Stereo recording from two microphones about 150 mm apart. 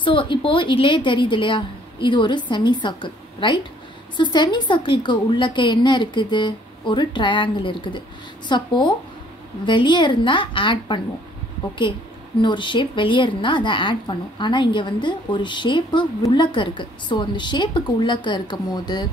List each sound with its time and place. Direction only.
0.0 s a woman's voice: 35° left (ahead or behind)
12.4 s a woman's voice: 30° left (ahead or behind)